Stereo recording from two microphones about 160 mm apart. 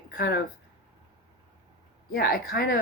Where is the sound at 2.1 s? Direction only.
65° left (ahead or behind).